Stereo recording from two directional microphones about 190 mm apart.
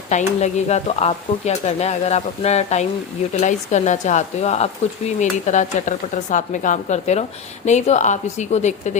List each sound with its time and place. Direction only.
0.1 s speech: 40° left (ahead or behind)